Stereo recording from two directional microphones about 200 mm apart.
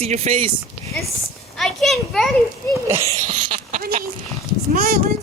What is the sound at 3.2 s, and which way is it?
A man's voice, 40° right (ahead or behind).